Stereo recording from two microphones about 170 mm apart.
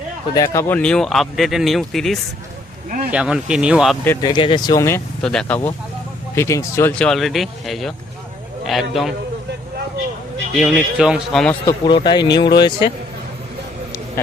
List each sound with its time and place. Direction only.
0.3 s speech: 15° left (ahead or behind); by 3.9 s 5° right (ahead or behind)
4.2 s speech: 30° left (ahead or behind)
5.2 s speech: 5° left (ahead or behind)
6.3 s speech: 15° left (ahead or behind)
7.0 s speech: centre (ahead or behind)
10.6 s speech: 5° right (ahead or behind)
11.6 s speech: 25° left (ahead or behind)